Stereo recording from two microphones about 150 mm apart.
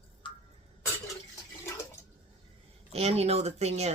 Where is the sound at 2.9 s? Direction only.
45° right (ahead or behind).